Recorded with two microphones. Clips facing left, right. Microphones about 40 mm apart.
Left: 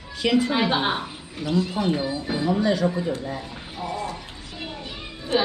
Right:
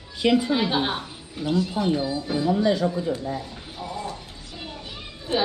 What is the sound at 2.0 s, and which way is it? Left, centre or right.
Speech, left.